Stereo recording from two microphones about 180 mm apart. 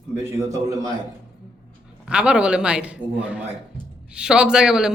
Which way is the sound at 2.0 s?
5° right (ahead or behind).